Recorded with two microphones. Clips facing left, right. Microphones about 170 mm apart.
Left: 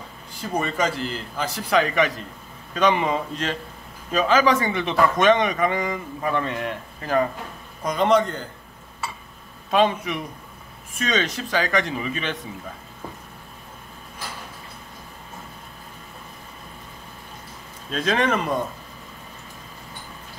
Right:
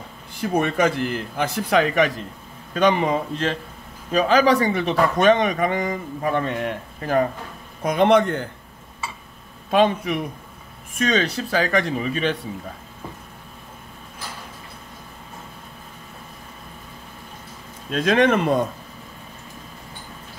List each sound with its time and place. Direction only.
0.4 s a man's voice: 60° right (ahead or behind)
7.8 s a man's voice: 55° right (ahead or behind)
9.7 s speech: 45° right (ahead or behind)
17.9 s a man's voice: 55° right (ahead or behind)